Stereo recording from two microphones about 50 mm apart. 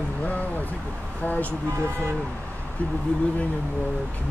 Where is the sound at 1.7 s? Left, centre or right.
Right.